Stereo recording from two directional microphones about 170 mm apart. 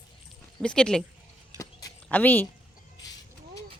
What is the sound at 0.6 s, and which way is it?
Speech, 5° left (ahead or behind).